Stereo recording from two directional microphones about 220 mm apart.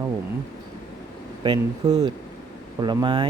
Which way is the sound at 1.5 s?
20° right (ahead or behind).